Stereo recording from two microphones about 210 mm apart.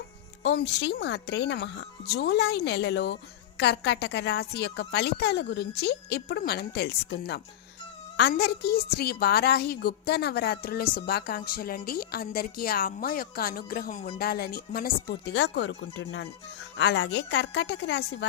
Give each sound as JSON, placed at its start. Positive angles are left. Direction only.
{"t": 0.4, "sound": "a woman's voice", "side_deg": 55}